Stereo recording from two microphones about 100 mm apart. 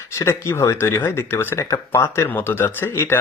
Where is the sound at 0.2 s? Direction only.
30° left (ahead or behind).